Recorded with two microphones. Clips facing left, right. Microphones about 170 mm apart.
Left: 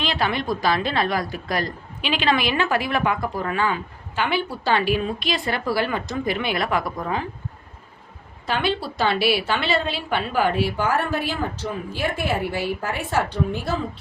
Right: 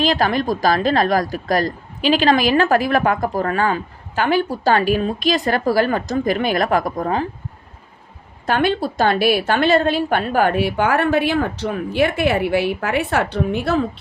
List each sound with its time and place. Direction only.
0.0 s a woman's voice: 40° right (ahead or behind)
8.4 s a woman's voice: 50° right (ahead or behind); by 13.7 s 65° right (ahead or behind)